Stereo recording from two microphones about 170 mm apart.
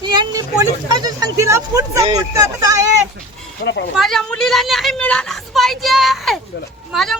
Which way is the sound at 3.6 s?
90° left.